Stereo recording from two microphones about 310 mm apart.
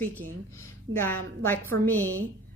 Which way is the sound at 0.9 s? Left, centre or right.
Right.